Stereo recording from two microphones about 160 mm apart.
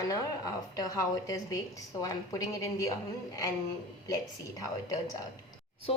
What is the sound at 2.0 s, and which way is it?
Speech, 20° left (ahead or behind).